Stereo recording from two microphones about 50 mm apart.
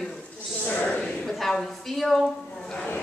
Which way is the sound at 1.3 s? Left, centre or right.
Centre.